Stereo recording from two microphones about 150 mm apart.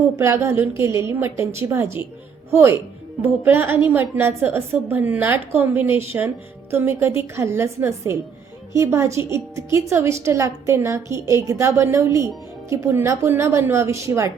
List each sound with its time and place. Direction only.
0.2 s a woman's voice: 20° right (ahead or behind)